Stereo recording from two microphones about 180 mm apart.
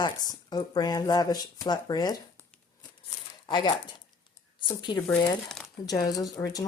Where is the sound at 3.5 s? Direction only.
25° left (ahead or behind).